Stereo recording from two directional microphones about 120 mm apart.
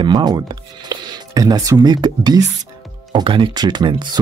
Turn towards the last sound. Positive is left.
turn(degrees=-40)  # may be behind; listen again after turning